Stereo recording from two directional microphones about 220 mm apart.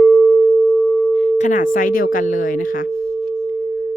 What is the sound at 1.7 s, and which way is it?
Speech, 40° left (ahead or behind).